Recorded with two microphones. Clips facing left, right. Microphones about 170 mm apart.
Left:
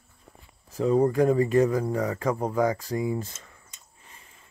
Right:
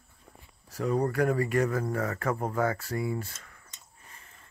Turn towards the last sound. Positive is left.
turn(degrees=15)  # may be behind; listen again after turning